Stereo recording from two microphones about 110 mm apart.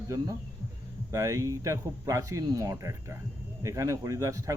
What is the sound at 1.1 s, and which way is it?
Speech, 30° right (ahead or behind).